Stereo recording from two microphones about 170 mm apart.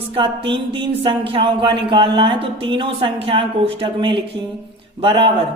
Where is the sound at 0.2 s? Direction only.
30° right (ahead or behind).